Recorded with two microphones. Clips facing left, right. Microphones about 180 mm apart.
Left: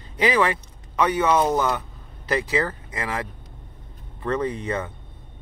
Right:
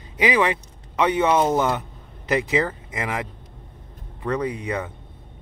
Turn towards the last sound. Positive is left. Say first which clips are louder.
# even
turn(degrees=-15)  # may be behind; listen again after turning